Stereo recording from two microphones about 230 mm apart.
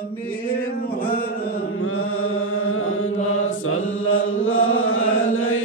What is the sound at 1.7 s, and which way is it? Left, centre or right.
Chant, left.